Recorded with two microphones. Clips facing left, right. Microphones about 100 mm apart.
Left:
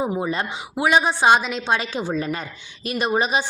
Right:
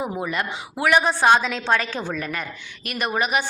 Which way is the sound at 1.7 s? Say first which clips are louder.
Left 1 dB; 20° left (ahead or behind).